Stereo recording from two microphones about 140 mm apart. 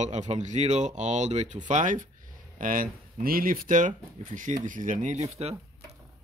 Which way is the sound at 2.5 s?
75° right (ahead or behind).